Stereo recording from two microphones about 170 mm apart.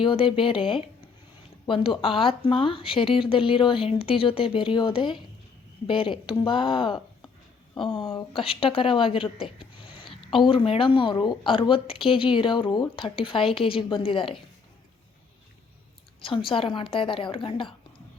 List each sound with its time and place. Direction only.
0.0 s a woman's voice: 30° left (ahead or behind)
1.6 s a woman's voice: 30° left (ahead or behind)
16.5 s a woman's voice: 30° left (ahead or behind)